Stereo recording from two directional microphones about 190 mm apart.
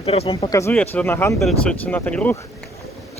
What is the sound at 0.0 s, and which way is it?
Speech, 30° left (ahead or behind).